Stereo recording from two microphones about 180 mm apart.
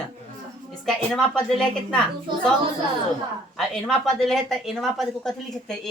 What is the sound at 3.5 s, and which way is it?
A woman's voice, centre (ahead or behind).